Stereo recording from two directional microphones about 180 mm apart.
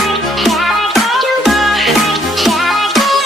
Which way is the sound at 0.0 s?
Centre (ahead or behind).